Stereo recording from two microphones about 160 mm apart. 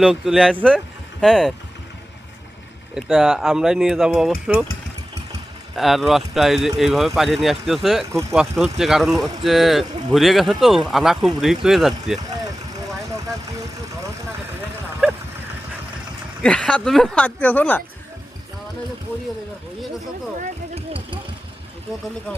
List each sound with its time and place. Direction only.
0.0 s speech: centre (ahead or behind)
2.9 s speech: 5° right (ahead or behind)
5.7 s speech: centre (ahead or behind)
16.4 s speech: 5° left (ahead or behind)
20.7 s vehicle: 35° right (ahead or behind)